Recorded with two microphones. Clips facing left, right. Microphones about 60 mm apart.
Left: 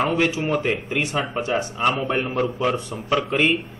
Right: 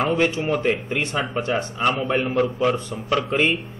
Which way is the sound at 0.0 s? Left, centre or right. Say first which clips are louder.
Even; centre.